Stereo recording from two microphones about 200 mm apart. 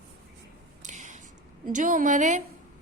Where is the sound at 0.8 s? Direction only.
40° right (ahead or behind).